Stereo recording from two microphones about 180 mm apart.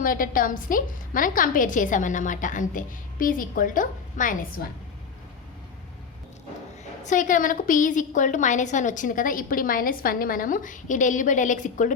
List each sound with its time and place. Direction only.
0.0 s a woman's voice: 50° left (ahead or behind)
7.0 s a woman's voice: 45° left (ahead or behind)